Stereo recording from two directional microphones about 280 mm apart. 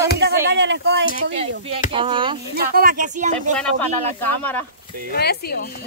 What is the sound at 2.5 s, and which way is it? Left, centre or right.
Speech, right.